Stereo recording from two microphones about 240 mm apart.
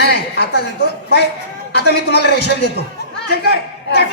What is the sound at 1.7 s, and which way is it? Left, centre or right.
A woman's voice, left.